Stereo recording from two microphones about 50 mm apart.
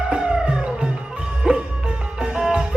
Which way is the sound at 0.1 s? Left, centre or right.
Centre.